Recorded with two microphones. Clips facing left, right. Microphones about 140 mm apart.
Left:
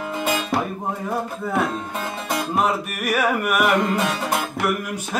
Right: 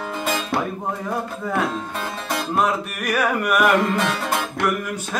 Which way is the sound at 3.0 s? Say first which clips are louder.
Even; 5° left (ahead or behind).